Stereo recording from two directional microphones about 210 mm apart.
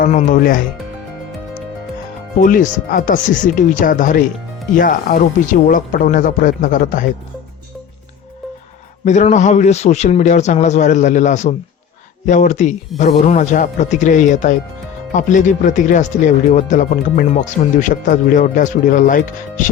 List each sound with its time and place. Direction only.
0.0 s speech: 35° left (ahead or behind)
2.4 s speech: 40° left (ahead or behind)
9.0 s speech: 35° left (ahead or behind)